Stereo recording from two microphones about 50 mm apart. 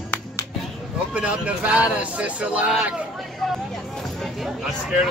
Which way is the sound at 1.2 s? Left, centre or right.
Right.